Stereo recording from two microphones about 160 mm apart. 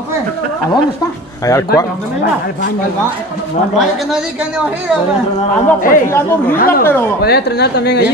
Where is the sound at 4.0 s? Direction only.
5° right (ahead or behind).